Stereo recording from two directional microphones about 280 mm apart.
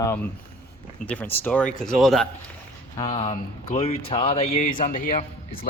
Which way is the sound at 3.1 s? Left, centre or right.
Left.